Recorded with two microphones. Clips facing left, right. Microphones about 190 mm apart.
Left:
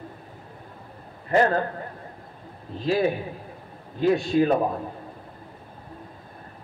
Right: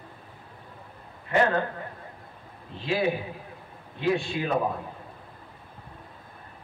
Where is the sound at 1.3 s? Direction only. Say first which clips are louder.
Left 3 dB; 40° left (ahead or behind).